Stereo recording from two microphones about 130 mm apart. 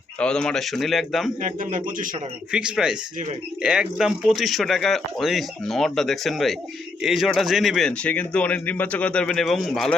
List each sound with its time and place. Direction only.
0.2 s speech: 5° left (ahead or behind)
1.4 s a man's voice: 90° right
2.5 s speech: 5° right (ahead or behind)